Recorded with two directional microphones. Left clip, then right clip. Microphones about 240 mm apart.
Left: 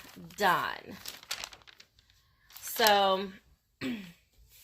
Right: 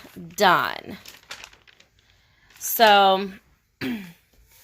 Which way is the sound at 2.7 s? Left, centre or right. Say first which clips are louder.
Right 9 dB; right.